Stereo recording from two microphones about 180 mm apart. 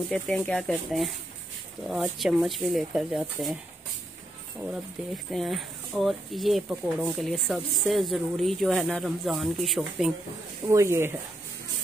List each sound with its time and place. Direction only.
0.1 s speech: 5° left (ahead or behind)
4.6 s speech: 5° right (ahead or behind)
10.7 s speech: 15° right (ahead or behind)